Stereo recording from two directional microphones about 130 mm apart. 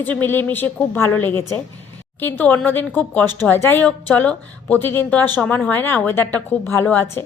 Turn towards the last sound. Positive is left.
turn(degrees=15)  # may be behind; listen again after turning